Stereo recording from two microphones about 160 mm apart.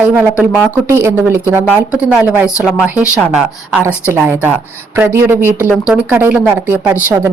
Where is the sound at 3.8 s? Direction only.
15° right (ahead or behind).